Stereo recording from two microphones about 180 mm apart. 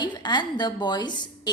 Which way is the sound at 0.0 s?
25° left (ahead or behind).